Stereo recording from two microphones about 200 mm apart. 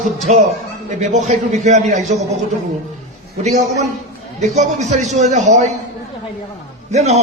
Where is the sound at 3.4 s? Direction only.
35° right (ahead or behind).